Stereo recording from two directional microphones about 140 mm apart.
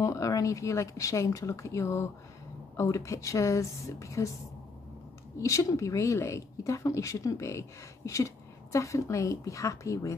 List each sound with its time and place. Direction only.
0.0 s speech: 25° left (ahead or behind)
5.4 s speech: 25° left (ahead or behind)